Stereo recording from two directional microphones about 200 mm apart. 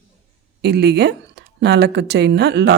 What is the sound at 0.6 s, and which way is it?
Speech, 55° right (ahead or behind).